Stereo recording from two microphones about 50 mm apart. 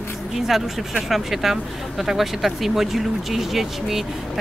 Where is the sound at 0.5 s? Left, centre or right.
Centre.